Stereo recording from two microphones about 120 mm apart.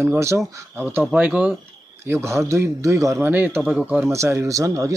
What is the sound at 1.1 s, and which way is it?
Speech, 10° right (ahead or behind).